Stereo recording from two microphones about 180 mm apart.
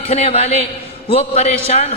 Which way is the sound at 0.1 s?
35° left (ahead or behind).